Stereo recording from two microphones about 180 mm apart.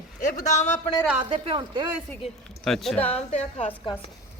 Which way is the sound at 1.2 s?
30° right (ahead or behind).